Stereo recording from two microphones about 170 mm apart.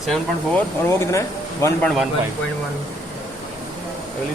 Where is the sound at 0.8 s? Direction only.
15° left (ahead or behind).